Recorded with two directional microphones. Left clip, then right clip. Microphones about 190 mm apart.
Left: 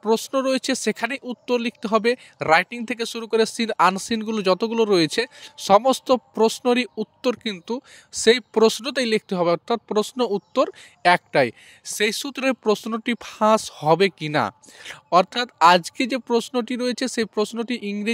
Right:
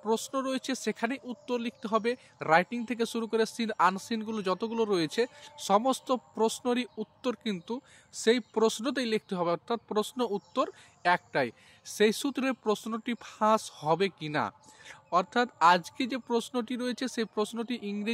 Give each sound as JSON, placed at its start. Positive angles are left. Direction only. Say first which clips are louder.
{"t": 0.0, "sound": "speech", "louder": "left 9 dB", "side_deg": 40}